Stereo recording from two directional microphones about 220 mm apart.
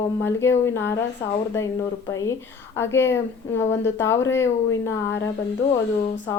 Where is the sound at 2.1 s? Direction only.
15° left (ahead or behind).